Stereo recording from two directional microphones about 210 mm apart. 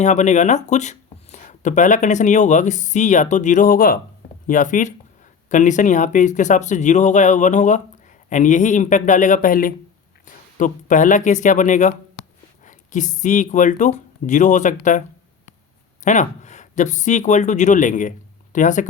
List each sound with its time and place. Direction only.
0.0 s speech: 35° left (ahead or behind)
16.0 s speech: 35° left (ahead or behind)